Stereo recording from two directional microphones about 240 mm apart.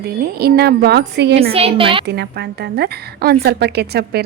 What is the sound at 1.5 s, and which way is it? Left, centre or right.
Speech, right.